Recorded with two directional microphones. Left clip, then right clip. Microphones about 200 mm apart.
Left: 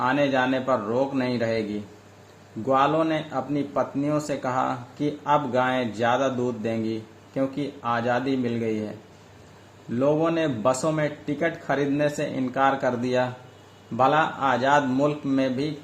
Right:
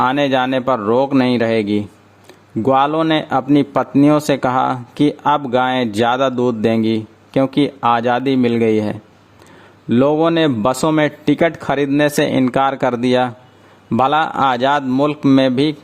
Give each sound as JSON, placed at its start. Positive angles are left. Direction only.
{"t": 0.0, "sound": "speech", "side_deg": -55}
{"t": 2.6, "sound": "speech", "side_deg": -55}
{"t": 9.9, "sound": "speech", "side_deg": -55}